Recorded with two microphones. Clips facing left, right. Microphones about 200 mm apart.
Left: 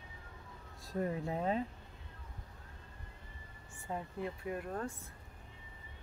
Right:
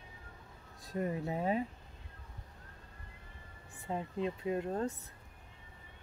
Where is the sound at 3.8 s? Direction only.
20° right (ahead or behind).